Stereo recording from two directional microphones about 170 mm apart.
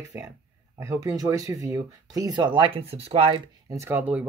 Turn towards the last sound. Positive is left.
turn(degrees=-10)  # may be behind; listen again after turning